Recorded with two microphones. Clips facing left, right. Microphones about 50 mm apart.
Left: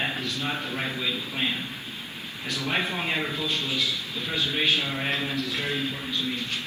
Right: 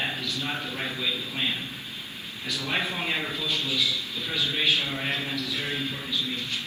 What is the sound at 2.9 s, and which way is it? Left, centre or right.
Speech, centre.